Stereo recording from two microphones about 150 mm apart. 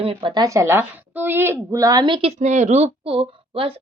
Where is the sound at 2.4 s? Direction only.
50° right (ahead or behind).